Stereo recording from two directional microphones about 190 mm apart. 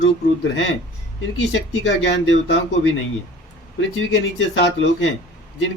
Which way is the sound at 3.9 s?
80° left.